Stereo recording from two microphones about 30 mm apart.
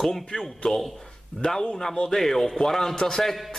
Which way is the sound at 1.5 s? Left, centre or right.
Centre.